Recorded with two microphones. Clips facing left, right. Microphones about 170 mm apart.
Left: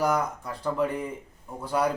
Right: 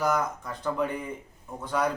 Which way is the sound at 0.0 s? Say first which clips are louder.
Left 1 dB; 10° left (ahead or behind).